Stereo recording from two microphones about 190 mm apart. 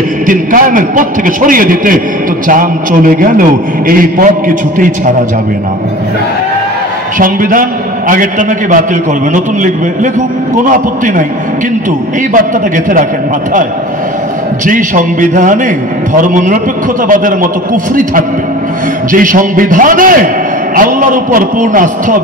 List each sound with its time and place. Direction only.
0.3 s a man's voice: 45° right (ahead or behind)
7.2 s a man's voice: 45° right (ahead or behind)
10.6 s a man's voice: 45° right (ahead or behind)
12.4 s a man's voice: 45° right (ahead or behind)
14.7 s a man's voice: 45° right (ahead or behind)
19.1 s a man's voice: 45° right (ahead or behind)